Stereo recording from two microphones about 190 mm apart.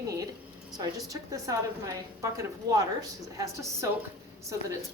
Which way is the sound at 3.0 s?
15° right (ahead or behind).